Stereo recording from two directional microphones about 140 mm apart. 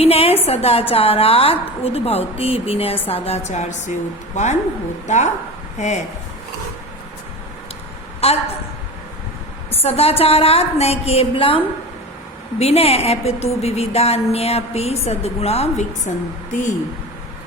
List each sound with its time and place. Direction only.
0.0 s a sound: 45° left (ahead or behind)
0.4 s a woman's voice: 45° left (ahead or behind)
5.0 s a woman's voice: 55° left (ahead or behind)
8.2 s a woman's voice: 45° left (ahead or behind)
9.8 s a woman's voice: 45° left (ahead or behind); by 16.7 s 60° left (ahead or behind)